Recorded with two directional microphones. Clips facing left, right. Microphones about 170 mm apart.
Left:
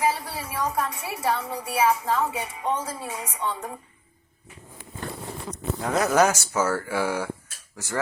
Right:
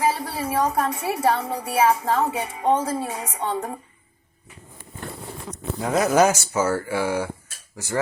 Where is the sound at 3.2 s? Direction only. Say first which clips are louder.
Right 4 dB; 55° right (ahead or behind).